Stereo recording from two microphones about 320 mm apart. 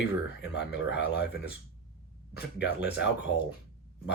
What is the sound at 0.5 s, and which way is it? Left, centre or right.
Speech, left.